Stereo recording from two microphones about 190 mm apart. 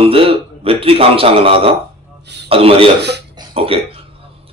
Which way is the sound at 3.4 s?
30° right (ahead or behind).